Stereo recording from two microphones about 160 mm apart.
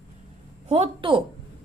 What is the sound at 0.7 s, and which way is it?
Speech, 40° right (ahead or behind).